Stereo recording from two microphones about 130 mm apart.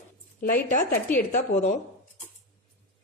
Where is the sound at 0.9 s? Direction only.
15° left (ahead or behind).